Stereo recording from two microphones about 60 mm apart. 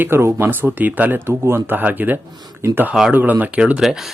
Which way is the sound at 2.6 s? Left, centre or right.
Right.